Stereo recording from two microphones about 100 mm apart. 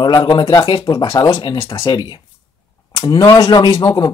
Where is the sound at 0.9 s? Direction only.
40° left (ahead or behind).